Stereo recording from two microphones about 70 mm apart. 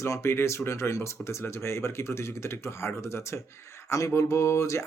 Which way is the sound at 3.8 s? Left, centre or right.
Left.